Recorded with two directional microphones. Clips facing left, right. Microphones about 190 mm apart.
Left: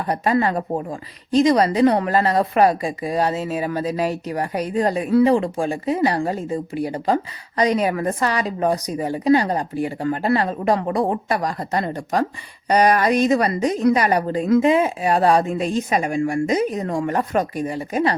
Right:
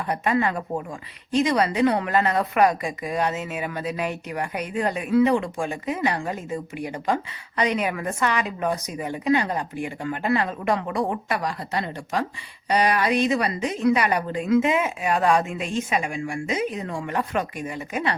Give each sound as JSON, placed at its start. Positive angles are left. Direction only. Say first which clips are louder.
{"t": 0.1, "sound": "a woman's voice", "louder": "left 4 dB", "side_deg": 35}